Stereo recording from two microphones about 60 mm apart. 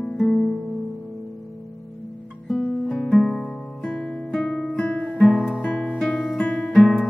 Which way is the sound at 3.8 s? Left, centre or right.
Centre.